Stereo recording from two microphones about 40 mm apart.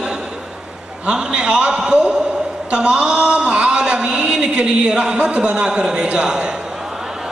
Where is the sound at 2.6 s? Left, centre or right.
Right.